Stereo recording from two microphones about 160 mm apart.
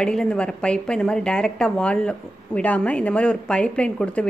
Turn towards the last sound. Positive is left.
turn(degrees=5)  # may be behind; listen again after turning